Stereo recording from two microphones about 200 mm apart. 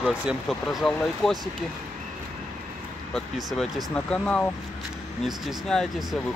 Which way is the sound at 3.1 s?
Centre (ahead or behind).